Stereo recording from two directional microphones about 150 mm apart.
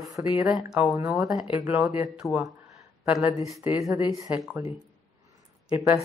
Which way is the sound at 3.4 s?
Centre (ahead or behind).